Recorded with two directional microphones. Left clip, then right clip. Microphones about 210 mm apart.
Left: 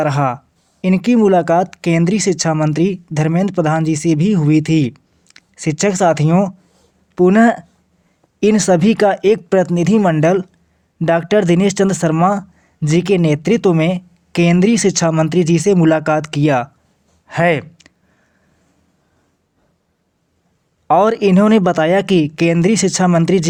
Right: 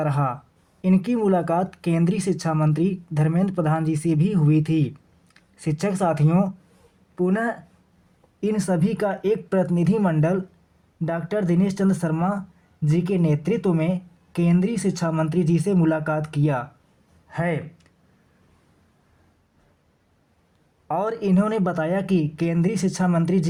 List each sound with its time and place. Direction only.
0.0 s speech: 30° left (ahead or behind)
17.2 s a sound: 40° left (ahead or behind)
20.8 s speech: 40° left (ahead or behind)